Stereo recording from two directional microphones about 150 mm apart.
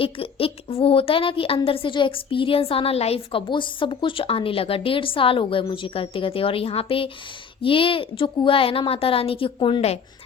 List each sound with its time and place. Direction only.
0.0 s a woman's voice: 40° left (ahead or behind)